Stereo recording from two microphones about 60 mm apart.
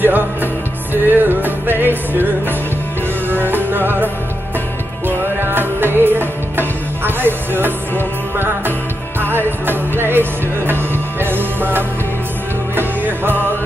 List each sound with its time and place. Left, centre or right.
0.0 s music: right